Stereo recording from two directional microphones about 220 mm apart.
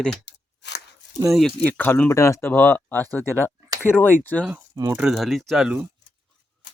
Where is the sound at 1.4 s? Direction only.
5° left (ahead or behind).